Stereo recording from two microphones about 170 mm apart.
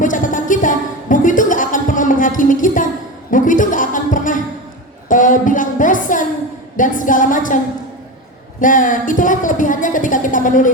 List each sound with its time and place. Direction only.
0.0 s music: 50° left (ahead or behind)
5.0 s a sound: 50° left (ahead or behind)
6.7 s music: 50° left (ahead or behind)
8.6 s a woman's voice: 50° left (ahead or behind)